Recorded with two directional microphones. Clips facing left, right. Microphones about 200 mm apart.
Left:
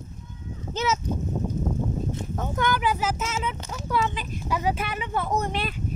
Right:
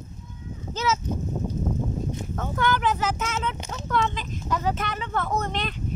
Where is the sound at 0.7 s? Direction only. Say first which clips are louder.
Even; 20° left (ahead or behind).